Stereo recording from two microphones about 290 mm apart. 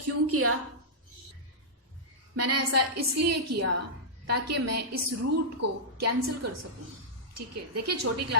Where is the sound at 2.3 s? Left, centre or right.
Right.